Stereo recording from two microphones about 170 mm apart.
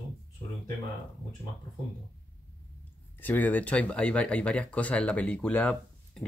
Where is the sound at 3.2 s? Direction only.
10° left (ahead or behind).